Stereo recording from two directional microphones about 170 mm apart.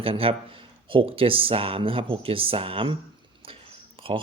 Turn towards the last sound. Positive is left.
turn(degrees=-30)  # may be behind; listen again after turning